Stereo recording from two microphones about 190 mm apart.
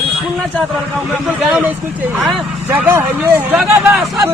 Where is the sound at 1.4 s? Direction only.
5° right (ahead or behind).